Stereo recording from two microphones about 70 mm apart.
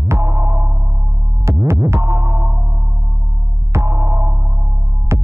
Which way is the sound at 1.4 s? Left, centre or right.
Right.